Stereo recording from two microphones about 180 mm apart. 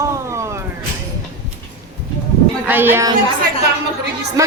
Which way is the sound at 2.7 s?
10° right (ahead or behind).